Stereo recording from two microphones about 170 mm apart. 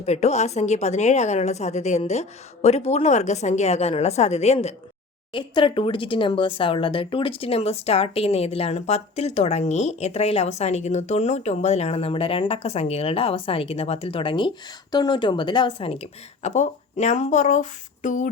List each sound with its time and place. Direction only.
0.0 s speech: 40° left (ahead or behind)
5.3 s speech: 30° left (ahead or behind); by 18.3 s 45° left (ahead or behind)